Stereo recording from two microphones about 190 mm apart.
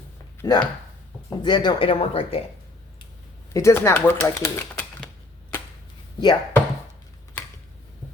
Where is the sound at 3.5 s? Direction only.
15° left (ahead or behind).